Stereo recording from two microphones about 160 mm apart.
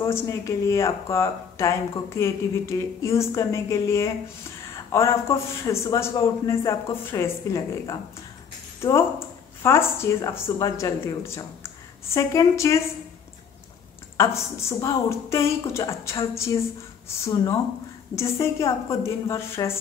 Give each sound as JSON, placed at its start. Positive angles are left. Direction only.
{"t": 0.0, "sound": "a man's voice", "side_deg": 20}
{"t": 9.6, "sound": "a man's voice", "side_deg": 15}
{"t": 14.1, "sound": "a man's voice", "side_deg": 15}